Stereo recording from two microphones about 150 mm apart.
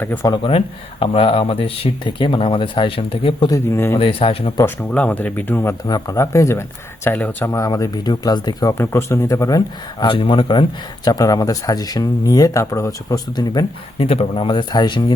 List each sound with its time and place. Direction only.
0.0 s speech: 15° left (ahead or behind)
0.3 s speech: 35° left (ahead or behind)
3.5 s speech: 15° left (ahead or behind)
3.9 s speech: 35° left (ahead or behind)
4.5 s speech: 15° left (ahead or behind)
8.8 s speech: 15° left (ahead or behind)